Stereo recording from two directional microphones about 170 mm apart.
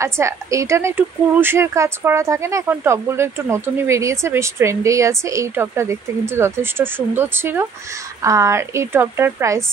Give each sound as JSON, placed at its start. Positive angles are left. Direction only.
{"t": 0.0, "sound": "a woman's voice", "side_deg": -15}